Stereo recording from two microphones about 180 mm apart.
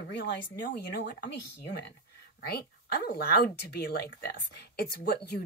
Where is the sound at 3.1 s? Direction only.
60° left (ahead or behind).